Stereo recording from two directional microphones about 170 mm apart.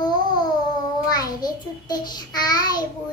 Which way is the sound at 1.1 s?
20° left (ahead or behind).